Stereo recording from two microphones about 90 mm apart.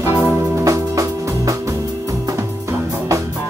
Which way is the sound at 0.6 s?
40° right (ahead or behind).